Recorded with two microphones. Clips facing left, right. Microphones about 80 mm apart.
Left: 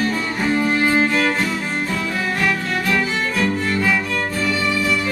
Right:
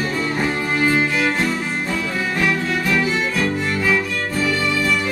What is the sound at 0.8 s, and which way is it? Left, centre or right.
Music, centre.